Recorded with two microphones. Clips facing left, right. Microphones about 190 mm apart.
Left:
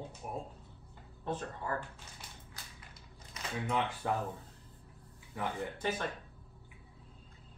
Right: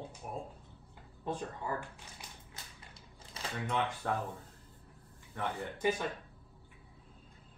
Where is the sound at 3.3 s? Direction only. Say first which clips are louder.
Right 1 dB; 30° right (ahead or behind).